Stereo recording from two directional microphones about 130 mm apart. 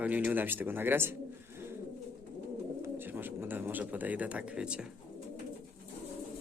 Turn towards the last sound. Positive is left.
turn(degrees=-10)  # may be behind; listen again after turning